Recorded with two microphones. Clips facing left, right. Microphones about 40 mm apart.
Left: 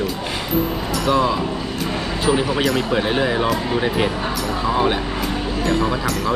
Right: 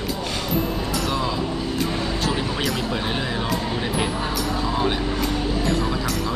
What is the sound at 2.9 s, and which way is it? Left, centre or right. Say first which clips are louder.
Speech: left 6 dB; centre.